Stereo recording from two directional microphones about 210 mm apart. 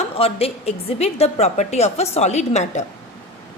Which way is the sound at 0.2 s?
30° left (ahead or behind).